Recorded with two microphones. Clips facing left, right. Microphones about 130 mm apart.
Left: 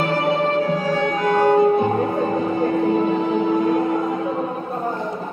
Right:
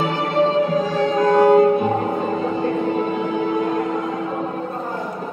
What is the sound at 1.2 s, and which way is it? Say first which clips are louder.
Music: right 4 dB; 20° right (ahead or behind).